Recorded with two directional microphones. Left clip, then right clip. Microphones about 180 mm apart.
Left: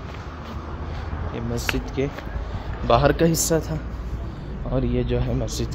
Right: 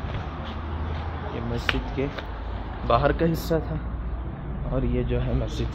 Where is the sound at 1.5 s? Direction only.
35° left (ahead or behind).